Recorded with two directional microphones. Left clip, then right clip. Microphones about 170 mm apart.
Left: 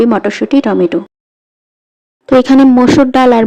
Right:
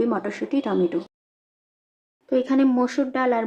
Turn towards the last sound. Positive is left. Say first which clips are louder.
# left 15 dB
turn(degrees=50)  # may be behind; listen again after turning